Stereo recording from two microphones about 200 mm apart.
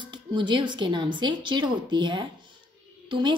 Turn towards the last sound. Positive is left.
turn(degrees=-25)  # may be behind; listen again after turning